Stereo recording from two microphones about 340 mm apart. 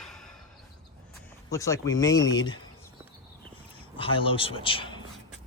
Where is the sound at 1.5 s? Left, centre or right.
Centre.